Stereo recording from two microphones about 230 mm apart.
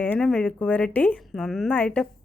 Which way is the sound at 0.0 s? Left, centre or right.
Centre.